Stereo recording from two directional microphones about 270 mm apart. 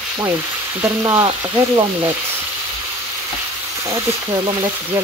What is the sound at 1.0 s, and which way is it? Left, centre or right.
Speech, centre.